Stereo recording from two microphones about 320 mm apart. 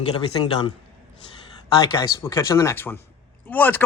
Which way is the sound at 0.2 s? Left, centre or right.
Centre.